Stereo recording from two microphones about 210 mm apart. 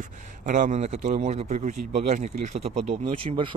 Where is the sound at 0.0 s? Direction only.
35° right (ahead or behind).